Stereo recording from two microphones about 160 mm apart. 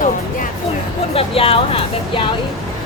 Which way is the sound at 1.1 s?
35° left (ahead or behind).